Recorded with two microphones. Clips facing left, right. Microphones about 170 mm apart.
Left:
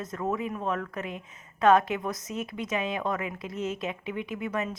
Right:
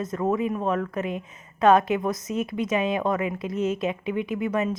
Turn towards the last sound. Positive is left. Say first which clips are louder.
# right 6 dB
turn(degrees=-15)  # may be behind; listen again after turning